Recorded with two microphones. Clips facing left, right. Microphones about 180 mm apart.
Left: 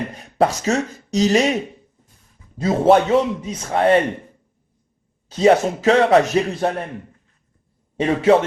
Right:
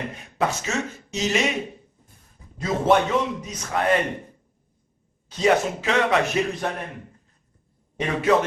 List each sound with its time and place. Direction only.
0.1 s speech: 35° left (ahead or behind)
2.6 s a man's voice: 30° left (ahead or behind)
5.4 s a man's voice: 35° left (ahead or behind)
7.9 s a man's voice: 30° left (ahead or behind)